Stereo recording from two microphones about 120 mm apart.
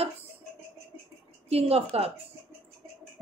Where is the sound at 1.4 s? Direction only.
60° right (ahead or behind).